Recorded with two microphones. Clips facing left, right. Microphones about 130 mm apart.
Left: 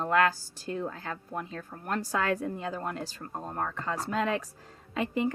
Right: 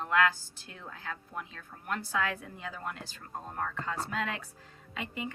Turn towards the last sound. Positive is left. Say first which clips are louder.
# left 9 dB
turn(degrees=40)  # may be behind; listen again after turning